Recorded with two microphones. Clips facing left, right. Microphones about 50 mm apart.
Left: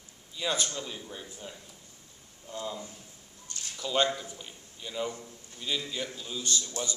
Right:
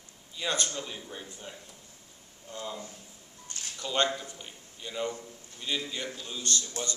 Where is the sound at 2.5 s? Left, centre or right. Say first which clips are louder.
Left 1 dB; centre.